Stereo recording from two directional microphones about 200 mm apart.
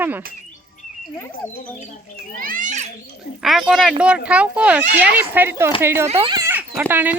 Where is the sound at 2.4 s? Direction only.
40° right (ahead or behind).